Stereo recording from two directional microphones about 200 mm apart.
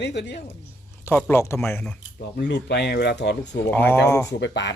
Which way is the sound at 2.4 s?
55° left (ahead or behind).